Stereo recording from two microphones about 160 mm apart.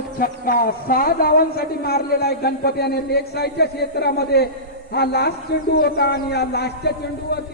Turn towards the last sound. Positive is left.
turn(degrees=90)